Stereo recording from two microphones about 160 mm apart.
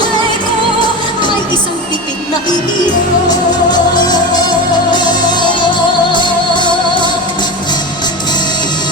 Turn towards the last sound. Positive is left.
turn(degrees=30)  # may be behind; listen again after turning